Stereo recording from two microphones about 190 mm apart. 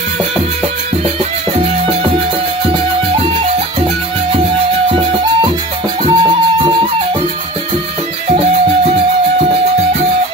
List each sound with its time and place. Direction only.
4.8 s music: 25° right (ahead or behind)